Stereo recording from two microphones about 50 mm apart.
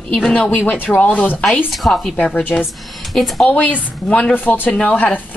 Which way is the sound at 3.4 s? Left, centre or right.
Left.